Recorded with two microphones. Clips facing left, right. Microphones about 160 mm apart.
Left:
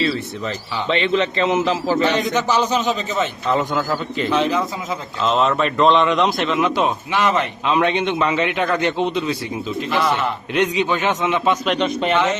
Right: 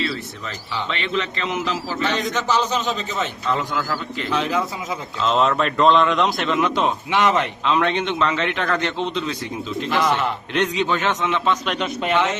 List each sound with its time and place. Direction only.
0.0 s a man's voice: 35° left (ahead or behind)
2.1 s a man's voice: 15° left (ahead or behind)
3.5 s a man's voice: 20° left (ahead or behind)
4.3 s a man's voice: centre (ahead or behind)
7.1 s speech: 15° right (ahead or behind)
7.6 s a man's voice: 15° left (ahead or behind)
11.7 s a man's voice: 5° right (ahead or behind)